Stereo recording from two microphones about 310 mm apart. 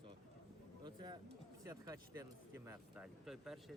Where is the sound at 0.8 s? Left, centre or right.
Centre.